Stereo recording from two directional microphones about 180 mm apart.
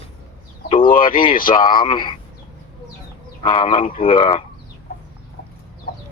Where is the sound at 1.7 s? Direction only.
25° left (ahead or behind).